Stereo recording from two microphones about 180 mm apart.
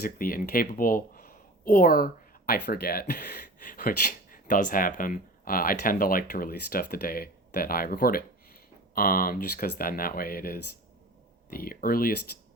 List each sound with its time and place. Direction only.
0.0 s speech: 50° left (ahead or behind)